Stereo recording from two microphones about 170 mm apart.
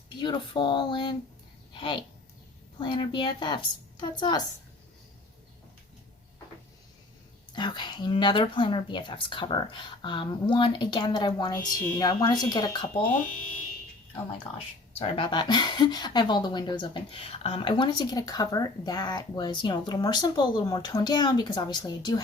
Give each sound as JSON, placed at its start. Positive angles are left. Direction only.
{"t": 0.2, "sound": "a woman's voice", "side_deg": 25}
{"t": 7.5, "sound": "a woman's voice", "side_deg": 25}
{"t": 14.9, "sound": "a woman's voice", "side_deg": 30}